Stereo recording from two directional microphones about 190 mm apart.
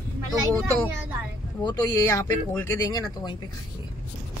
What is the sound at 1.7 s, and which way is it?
Speech, 15° left (ahead or behind).